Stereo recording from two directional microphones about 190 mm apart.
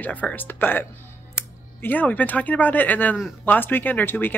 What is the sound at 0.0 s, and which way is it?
Speech, 10° left (ahead or behind).